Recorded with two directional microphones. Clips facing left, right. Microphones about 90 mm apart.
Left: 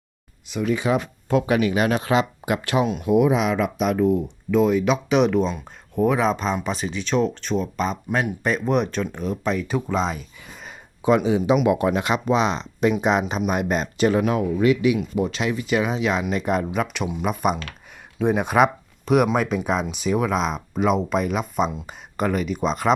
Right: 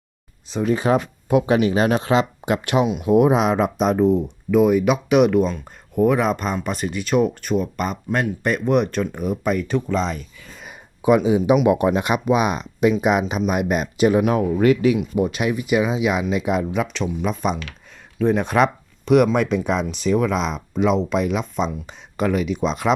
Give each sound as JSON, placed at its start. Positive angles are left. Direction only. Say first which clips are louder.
{"t": 0.4, "sound": "speech", "louder": "right 3 dB", "side_deg": -35}
{"t": 2.8, "sound": "speech", "louder": "right 2 dB", "side_deg": -5}
{"t": 3.1, "sound": "speech", "louder": "right 3 dB", "side_deg": -45}
{"t": 4.5, "sound": "speech", "louder": "right 3 dB", "side_deg": -10}
{"t": 9.6, "sound": "speech", "louder": "right 2 dB", "side_deg": 5}
{"t": 10.7, "sound": "a sound", "louder": "right 2 dB", "side_deg": -15}
{"t": 11.6, "sound": "speech", "louder": "right 2 dB", "side_deg": -20}
{"t": 14.3, "sound": "speech", "louder": "right 2 dB", "side_deg": -35}
{"t": 14.9, "sound": "speech", "louder": "right 3 dB", "side_deg": -15}
{"t": 18.2, "sound": "speech", "louder": "right 2 dB", "side_deg": 15}
{"t": 18.4, "sound": "speech", "louder": "even", "side_deg": 5}